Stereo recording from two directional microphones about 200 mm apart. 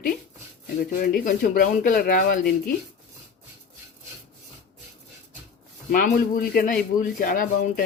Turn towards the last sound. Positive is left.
turn(degrees=45)  # may be behind; listen again after turning